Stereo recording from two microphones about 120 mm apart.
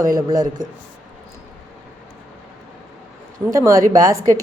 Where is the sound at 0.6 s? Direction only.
90° right.